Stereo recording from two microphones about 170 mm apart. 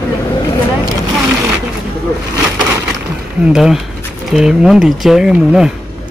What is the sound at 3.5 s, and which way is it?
Speech, 5° right (ahead or behind).